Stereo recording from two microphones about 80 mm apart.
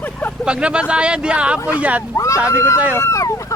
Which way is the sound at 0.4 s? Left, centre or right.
Centre.